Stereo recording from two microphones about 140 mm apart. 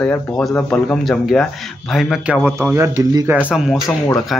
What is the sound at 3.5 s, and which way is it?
Speech, centre (ahead or behind).